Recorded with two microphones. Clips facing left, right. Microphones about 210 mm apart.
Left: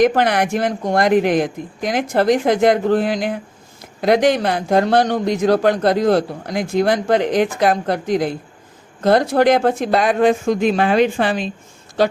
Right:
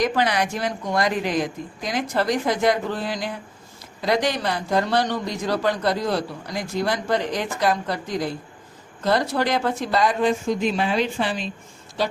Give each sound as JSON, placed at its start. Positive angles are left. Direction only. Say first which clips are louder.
{"t": 0.0, "sound": "speech", "louder": "left 6 dB", "side_deg": 55}